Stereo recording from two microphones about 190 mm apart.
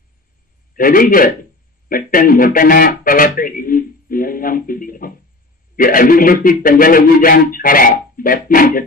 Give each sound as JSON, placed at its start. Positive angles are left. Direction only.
{"t": 0.7, "sound": "speech", "side_deg": 50}